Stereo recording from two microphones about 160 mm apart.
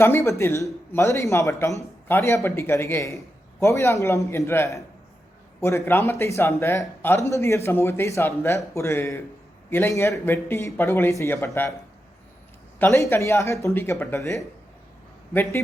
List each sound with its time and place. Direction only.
0.0 s speech: 15° left (ahead or behind)
12.8 s speech: 15° left (ahead or behind)